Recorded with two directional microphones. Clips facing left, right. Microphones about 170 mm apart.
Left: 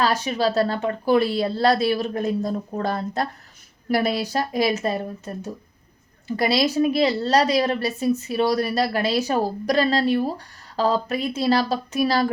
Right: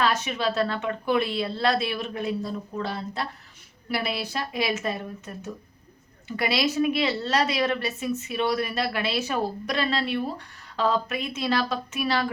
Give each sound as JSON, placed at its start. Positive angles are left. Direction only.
{"t": 0.0, "sound": "a woman's voice", "side_deg": 35}